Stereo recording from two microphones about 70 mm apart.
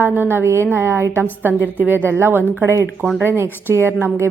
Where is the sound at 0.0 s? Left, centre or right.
Right.